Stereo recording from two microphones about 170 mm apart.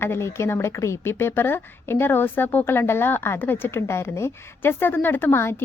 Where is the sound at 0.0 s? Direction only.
15° left (ahead or behind).